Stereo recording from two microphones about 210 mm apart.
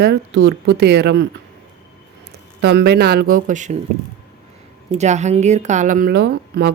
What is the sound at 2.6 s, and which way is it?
Speech, 50° right (ahead or behind).